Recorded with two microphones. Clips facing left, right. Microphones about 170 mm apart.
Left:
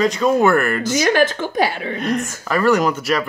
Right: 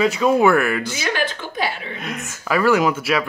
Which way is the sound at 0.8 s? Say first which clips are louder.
Left 7 dB; 45° left (ahead or behind).